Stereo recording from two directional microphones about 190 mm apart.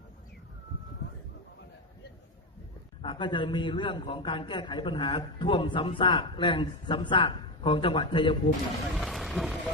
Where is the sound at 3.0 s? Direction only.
25° left (ahead or behind).